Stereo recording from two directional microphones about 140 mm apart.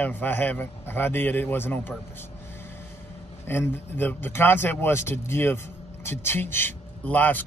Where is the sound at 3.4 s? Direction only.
15° left (ahead or behind).